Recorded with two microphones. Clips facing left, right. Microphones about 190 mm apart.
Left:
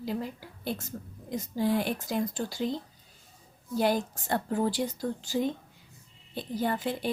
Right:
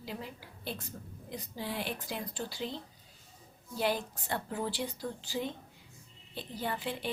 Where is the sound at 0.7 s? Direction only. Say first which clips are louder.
Left 5 dB; 45° left (ahead or behind).